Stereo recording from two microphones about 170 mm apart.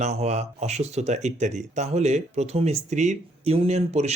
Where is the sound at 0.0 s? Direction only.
40° right (ahead or behind).